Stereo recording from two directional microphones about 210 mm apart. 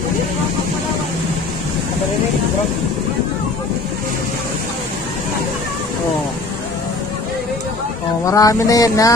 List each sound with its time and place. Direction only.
8.3 s mantra: 15° left (ahead or behind)